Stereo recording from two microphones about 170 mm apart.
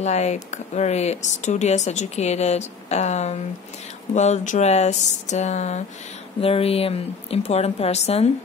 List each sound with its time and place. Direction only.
0.0 s speech: 40° left (ahead or behind)